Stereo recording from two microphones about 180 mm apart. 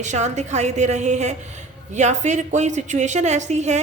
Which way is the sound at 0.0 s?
40° right (ahead or behind).